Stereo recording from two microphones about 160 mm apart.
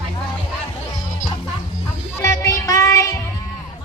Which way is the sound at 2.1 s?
20° left (ahead or behind).